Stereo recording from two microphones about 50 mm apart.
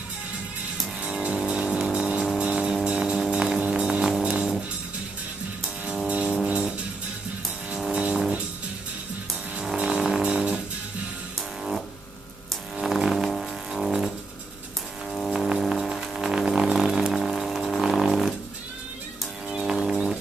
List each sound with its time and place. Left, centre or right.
1.0 s music: centre
6.0 s music: right
6.3 s music: centre
7.9 s music: centre
9.9 s music: centre
10.2 s music: right
12.7 s music: centre
13.3 s music: centre
16.8 s a sound: centre
17.1 s music: centre
19.5 s music: centre